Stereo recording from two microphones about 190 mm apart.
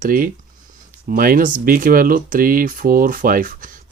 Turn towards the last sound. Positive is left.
turn(degrees=-45)  # may be behind; listen again after turning